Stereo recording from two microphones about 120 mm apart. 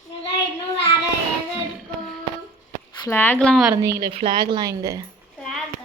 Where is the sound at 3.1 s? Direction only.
15° left (ahead or behind).